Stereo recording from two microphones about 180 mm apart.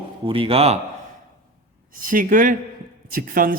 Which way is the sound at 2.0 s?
50° right (ahead or behind).